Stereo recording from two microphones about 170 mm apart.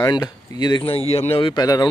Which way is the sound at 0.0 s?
20° left (ahead or behind).